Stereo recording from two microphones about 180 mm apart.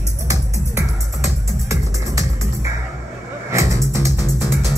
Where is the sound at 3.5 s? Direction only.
15° right (ahead or behind).